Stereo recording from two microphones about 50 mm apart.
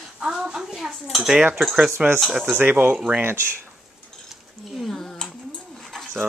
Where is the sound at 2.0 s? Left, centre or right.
Centre.